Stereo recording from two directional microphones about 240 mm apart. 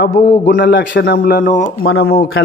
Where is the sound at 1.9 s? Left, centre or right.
Left.